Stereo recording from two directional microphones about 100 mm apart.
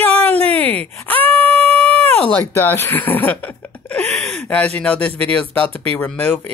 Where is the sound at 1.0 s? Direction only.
15° left (ahead or behind).